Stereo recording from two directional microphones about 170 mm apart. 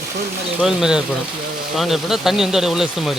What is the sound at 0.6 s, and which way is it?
Speech, 5° right (ahead or behind).